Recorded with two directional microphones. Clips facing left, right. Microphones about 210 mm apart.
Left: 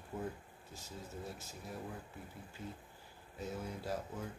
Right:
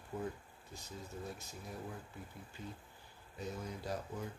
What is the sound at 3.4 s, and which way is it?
Speech, 5° left (ahead or behind).